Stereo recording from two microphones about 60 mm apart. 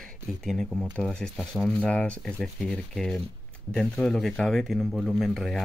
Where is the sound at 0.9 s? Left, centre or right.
Centre.